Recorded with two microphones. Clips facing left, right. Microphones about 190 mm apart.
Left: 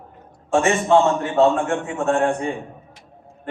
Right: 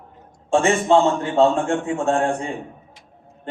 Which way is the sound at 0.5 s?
30° right (ahead or behind).